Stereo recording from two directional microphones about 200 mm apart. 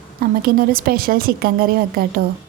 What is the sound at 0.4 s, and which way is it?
A woman's voice, 50° right (ahead or behind).